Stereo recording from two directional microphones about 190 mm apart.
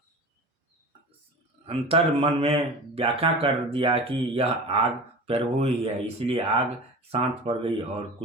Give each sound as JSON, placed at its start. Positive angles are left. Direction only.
{"t": 1.6, "sound": "speech", "side_deg": -30}